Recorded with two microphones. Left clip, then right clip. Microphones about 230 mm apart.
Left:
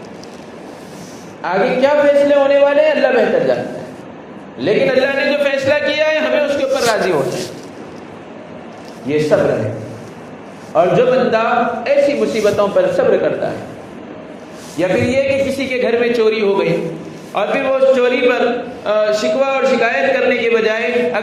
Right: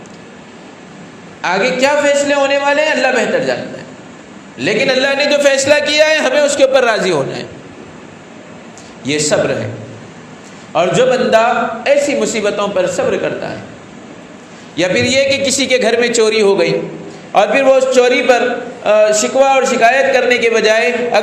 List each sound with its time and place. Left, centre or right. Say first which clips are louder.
1.4 s a man's voice: right 1 dB; right
4.5 s a man's voice: even; right
9.0 s a man's voice: left 1 dB; right
10.8 s a man's voice: even; right
14.8 s a man's voice: right 2 dB; right